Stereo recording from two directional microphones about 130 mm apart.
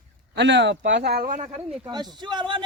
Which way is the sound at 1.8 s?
35° right (ahead or behind).